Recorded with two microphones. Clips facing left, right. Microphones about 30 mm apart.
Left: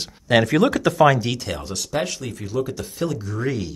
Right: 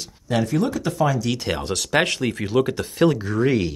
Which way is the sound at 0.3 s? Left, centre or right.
Left.